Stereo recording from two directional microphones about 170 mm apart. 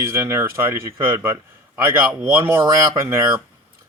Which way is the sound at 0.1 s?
15° right (ahead or behind).